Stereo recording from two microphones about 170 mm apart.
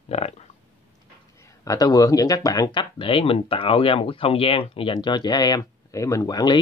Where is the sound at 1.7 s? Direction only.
20° left (ahead or behind).